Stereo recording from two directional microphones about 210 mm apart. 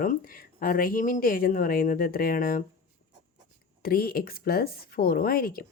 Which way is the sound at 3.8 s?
45° left (ahead or behind).